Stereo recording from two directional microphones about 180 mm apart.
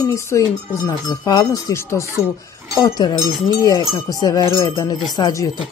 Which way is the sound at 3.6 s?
20° left (ahead or behind).